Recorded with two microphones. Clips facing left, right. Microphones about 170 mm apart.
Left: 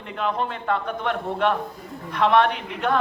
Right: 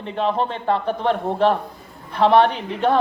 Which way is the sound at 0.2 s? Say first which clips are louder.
Right 4 dB; 30° right (ahead or behind).